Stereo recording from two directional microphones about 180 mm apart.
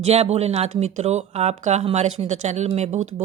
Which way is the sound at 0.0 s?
35° right (ahead or behind).